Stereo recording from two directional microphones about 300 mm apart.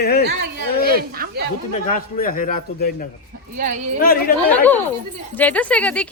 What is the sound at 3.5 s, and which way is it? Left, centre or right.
Speech, right.